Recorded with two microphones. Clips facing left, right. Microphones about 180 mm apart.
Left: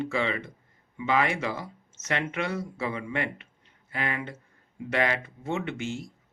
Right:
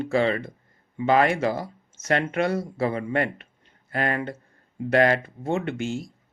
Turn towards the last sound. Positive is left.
turn(degrees=-40)  # may be behind; listen again after turning